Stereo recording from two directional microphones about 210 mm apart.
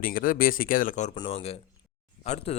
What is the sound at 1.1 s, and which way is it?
A man's voice, 25° left (ahead or behind).